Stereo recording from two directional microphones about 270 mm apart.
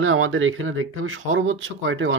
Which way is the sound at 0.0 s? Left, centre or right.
Right.